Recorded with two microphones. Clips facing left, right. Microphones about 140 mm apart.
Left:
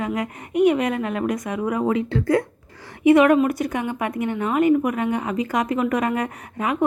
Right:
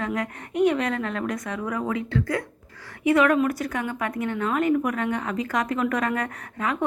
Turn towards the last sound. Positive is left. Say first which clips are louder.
# left 4 dB
turn(degrees=15)  # may be behind; listen again after turning